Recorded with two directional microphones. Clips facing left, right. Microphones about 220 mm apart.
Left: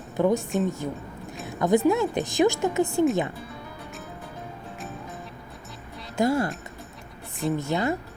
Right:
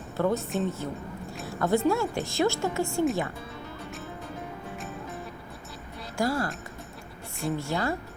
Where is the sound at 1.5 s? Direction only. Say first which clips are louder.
Left 4 dB; 15° left (ahead or behind).